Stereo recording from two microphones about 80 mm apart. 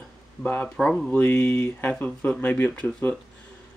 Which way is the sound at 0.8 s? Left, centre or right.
Centre.